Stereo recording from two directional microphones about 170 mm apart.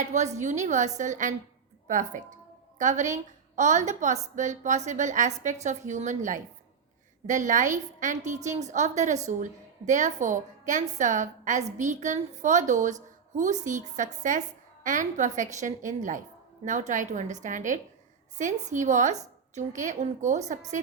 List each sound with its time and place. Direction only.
0.1 s a woman's voice: 45° right (ahead or behind)